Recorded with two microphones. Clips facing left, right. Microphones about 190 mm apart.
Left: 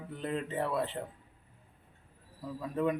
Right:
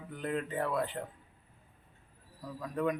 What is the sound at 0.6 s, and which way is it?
Speech, centre (ahead or behind).